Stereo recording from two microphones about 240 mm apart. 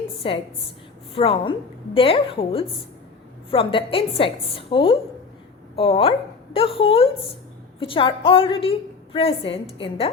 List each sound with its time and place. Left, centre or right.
0.2 s a woman's voice: left